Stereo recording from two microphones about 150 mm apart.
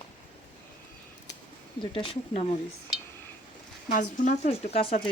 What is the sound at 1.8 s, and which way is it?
Speech, 35° left (ahead or behind).